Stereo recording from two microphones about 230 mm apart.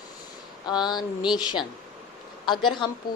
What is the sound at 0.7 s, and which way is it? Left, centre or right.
Speech, centre.